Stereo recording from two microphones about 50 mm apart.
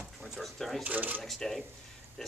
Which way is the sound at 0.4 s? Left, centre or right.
Centre.